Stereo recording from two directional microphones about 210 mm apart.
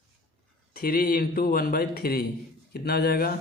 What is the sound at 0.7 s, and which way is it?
Speech, 45° left (ahead or behind).